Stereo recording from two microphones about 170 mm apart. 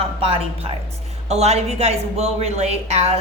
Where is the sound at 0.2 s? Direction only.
35° right (ahead or behind).